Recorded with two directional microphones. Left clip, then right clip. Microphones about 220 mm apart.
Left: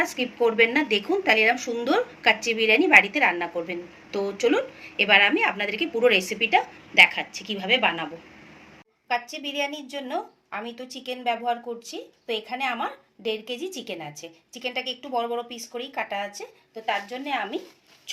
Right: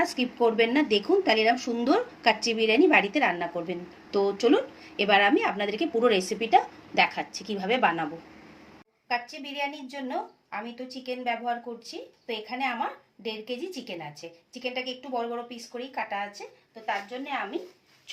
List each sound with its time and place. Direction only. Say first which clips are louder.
0.0 s speech: left 1 dB; 40° right (ahead or behind)
9.3 s a woman's voice: left 4 dB; 25° left (ahead or behind)